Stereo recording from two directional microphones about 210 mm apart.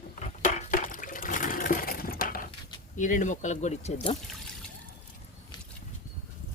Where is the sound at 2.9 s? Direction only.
35° left (ahead or behind).